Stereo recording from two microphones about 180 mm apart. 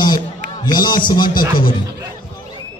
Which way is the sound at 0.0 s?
25° left (ahead or behind).